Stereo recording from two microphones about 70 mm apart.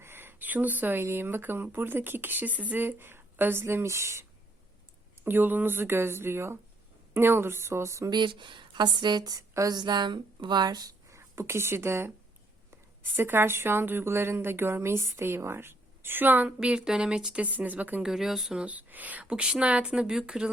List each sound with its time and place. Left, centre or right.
0.0 s a sound: right
1.0 s a woman's voice: right
5.2 s a woman's voice: right
8.7 s a woman's voice: right
11.1 s a woman's voice: right
16.6 s speech: centre
18.0 s speech: centre
18.6 s speech: right